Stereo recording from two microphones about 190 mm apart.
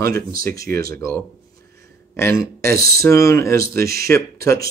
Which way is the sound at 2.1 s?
15° left (ahead or behind).